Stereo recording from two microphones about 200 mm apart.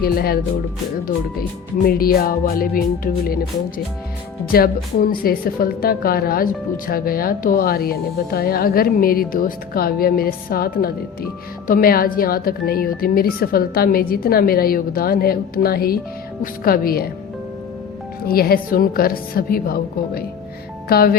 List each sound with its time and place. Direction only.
0.0 s a woman's voice: 50° left (ahead or behind)
4.5 s a woman's voice: 50° left (ahead or behind)
18.3 s a woman's voice: 50° left (ahead or behind)